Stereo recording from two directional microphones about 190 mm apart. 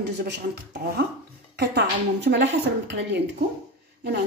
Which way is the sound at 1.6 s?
65° right (ahead or behind).